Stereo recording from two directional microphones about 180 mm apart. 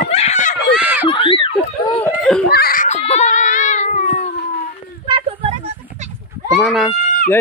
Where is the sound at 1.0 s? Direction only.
30° left (ahead or behind).